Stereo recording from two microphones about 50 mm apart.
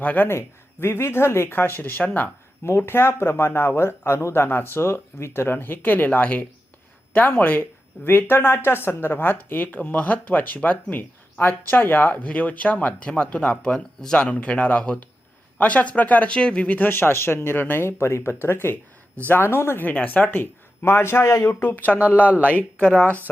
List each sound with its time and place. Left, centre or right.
0.0 s speech: left
0.3 s speech: left
2.6 s speech: left
8.1 s speech: left
12.1 s speech: left; by 14.2 s centre
14.2 s speech: left
16.9 s speech: left
18.4 s speech: left
19.9 s speech: left
20.4 s a man's voice: left
21.5 s speech: left
21.9 s speech: right
22.4 s speech: left